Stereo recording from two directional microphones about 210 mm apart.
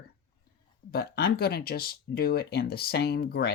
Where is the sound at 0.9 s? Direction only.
50° left (ahead or behind).